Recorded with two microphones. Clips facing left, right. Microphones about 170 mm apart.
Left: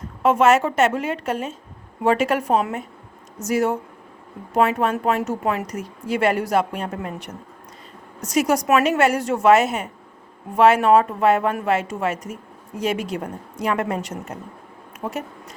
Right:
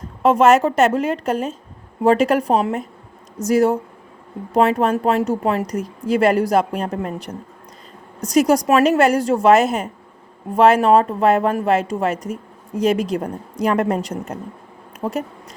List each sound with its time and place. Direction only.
0.2 s a woman's voice: 35° right (ahead or behind)